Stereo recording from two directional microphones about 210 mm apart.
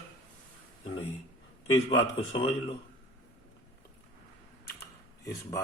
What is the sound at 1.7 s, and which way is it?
A man's voice, 25° left (ahead or behind).